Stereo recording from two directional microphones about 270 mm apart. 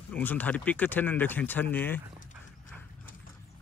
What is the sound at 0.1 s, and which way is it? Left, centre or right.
Speech, centre.